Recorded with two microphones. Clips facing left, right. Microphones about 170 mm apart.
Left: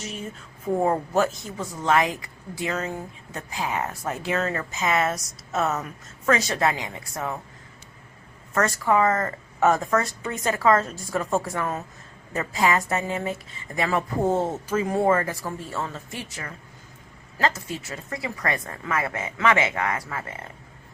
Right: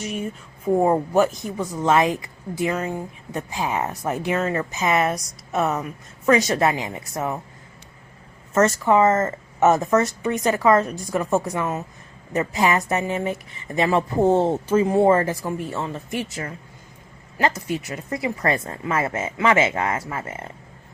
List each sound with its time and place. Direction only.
0.7 s speech: 15° right (ahead or behind)
8.5 s speech: 20° right (ahead or behind)
17.3 s speech: 20° right (ahead or behind)